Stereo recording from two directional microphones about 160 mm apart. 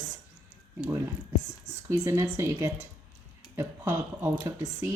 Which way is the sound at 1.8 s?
15° right (ahead or behind).